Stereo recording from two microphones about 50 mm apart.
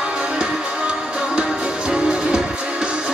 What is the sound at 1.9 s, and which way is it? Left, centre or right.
Music, centre.